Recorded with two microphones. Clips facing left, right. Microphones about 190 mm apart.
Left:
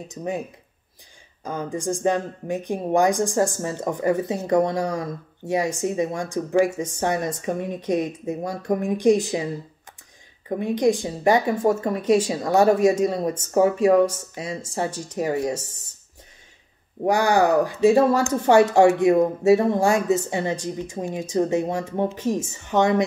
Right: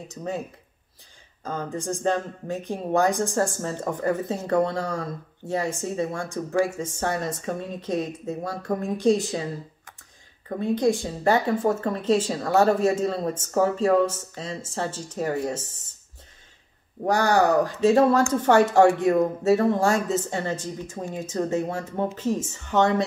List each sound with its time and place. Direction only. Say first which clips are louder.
0.1 s speech: left 3 dB; 15° left (ahead or behind)
1.4 s speech: left 3 dB; 15° left (ahead or behind)
10.5 s speech: left 2 dB; 15° left (ahead or behind)
17.0 s speech: left 2 dB; 10° left (ahead or behind)